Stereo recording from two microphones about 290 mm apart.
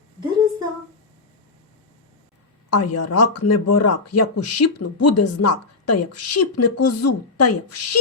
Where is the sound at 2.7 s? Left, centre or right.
Left.